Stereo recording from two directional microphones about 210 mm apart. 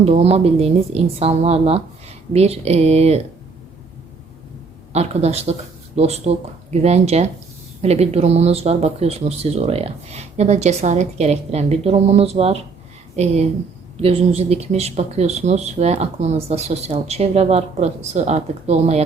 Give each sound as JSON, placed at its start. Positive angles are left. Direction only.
{"t": 0.0, "sound": "a woman's voice", "side_deg": -30}
{"t": 4.9, "sound": "speech", "side_deg": -30}